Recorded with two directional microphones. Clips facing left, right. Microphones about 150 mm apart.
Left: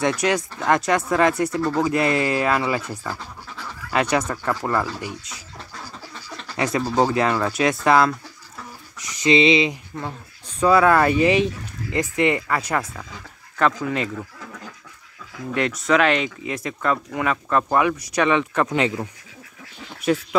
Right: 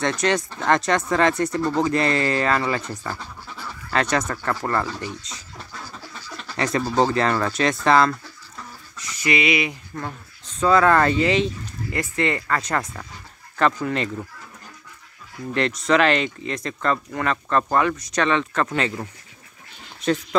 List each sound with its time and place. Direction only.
0.0 s speech: 10° left (ahead or behind)
6.4 s speech: 5° left (ahead or behind)
8.9 s a sound: 15° left (ahead or behind)
10.6 s speech: 10° left (ahead or behind)
15.5 s speech: 5° left (ahead or behind)